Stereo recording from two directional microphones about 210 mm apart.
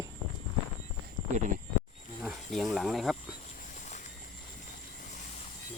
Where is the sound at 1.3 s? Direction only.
35° right (ahead or behind).